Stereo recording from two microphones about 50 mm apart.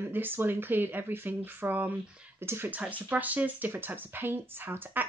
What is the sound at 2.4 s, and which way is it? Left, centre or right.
Speech, right.